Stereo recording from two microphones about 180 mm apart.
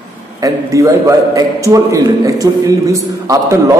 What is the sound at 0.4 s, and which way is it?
A man's voice, 15° right (ahead or behind).